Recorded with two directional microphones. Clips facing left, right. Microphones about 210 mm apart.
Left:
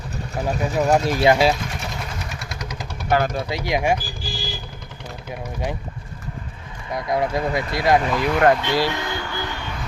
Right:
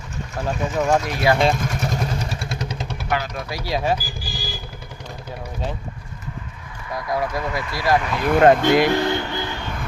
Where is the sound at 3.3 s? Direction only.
25° left (ahead or behind).